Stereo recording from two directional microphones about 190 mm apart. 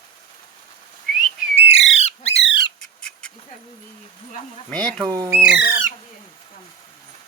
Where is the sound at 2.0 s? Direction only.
35° left (ahead or behind).